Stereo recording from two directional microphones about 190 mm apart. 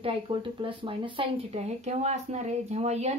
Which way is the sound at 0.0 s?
25° right (ahead or behind).